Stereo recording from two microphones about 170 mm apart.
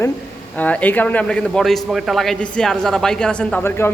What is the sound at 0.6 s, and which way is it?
A man's voice, 10° left (ahead or behind).